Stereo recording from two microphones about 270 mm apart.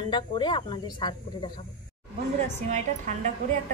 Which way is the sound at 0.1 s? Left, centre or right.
Centre.